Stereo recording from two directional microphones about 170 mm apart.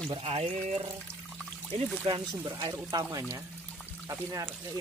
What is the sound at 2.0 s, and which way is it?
Speech, 30° right (ahead or behind).